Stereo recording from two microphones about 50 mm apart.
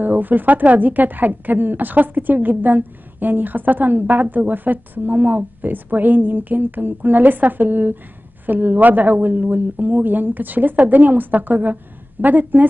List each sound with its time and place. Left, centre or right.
0.0 s a woman's voice: right